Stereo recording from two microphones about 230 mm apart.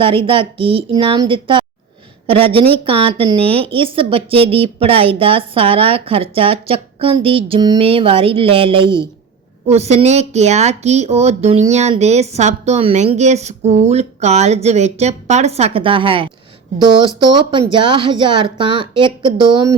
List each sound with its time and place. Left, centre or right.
0.0 s speech: right